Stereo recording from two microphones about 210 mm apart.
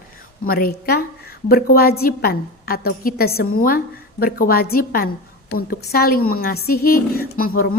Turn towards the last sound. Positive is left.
turn(degrees=45)  # may be behind; listen again after turning